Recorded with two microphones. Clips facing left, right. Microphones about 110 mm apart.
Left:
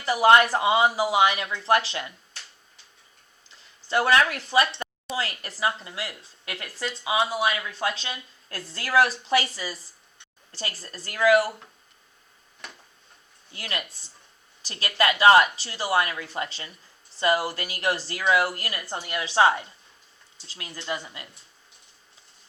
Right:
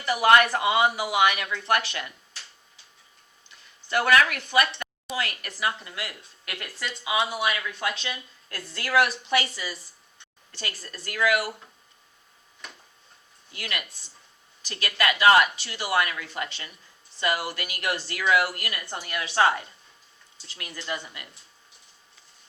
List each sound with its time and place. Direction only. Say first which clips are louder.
0.0 s speech: left 2 dB; 25° left (ahead or behind)
3.5 s a woman's voice: left 2 dB; 25° left (ahead or behind)
13.5 s a woman's voice: left 1 dB; 30° left (ahead or behind)